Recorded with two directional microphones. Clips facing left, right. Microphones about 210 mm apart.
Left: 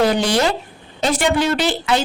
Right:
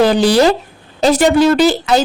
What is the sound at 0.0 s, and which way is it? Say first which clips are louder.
Speech: right 6 dB; 35° right (ahead or behind).